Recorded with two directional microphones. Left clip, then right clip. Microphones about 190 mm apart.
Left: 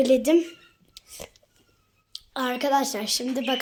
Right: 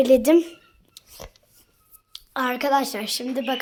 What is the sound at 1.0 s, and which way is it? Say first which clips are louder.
Whispering: left 1 dB; 10° left (ahead or behind).